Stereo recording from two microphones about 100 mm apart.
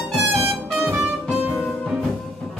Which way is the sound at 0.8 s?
20° right (ahead or behind).